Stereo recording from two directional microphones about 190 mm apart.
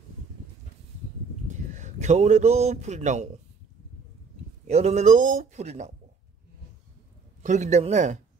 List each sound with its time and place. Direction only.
1.5 s a man's voice: 40° right (ahead or behind)
4.6 s speech: 35° right (ahead or behind)
7.4 s speech: 40° right (ahead or behind)